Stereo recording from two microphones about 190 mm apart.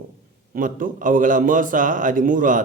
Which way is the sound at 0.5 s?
45° right (ahead or behind).